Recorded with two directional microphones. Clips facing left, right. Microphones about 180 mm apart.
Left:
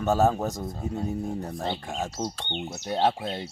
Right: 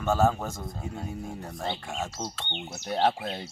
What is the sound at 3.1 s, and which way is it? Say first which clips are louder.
Speech: left 1 dB; centre (ahead or behind).